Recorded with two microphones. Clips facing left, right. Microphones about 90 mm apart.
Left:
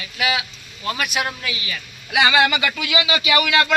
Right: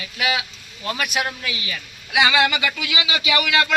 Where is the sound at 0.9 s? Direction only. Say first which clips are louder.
Even; centre (ahead or behind).